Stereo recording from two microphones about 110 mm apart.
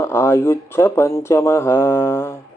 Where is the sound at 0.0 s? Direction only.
25° left (ahead or behind).